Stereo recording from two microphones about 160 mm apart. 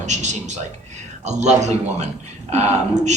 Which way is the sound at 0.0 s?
45° right (ahead or behind).